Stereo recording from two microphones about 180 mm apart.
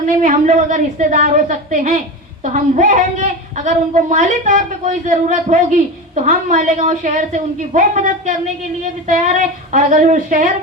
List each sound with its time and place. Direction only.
0.2 s a woman's voice: 45° right (ahead or behind)